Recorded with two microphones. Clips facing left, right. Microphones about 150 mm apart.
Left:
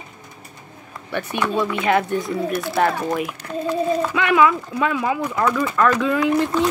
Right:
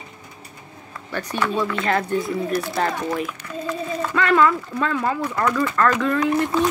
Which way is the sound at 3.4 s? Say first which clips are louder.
Left 4 dB; 35° left (ahead or behind).